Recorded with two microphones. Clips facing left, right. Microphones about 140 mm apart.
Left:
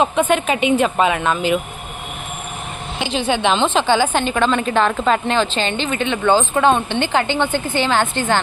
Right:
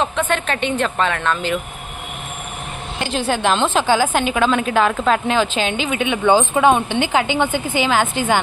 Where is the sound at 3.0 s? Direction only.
5° right (ahead or behind).